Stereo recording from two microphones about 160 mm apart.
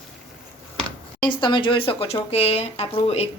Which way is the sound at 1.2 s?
30° left (ahead or behind).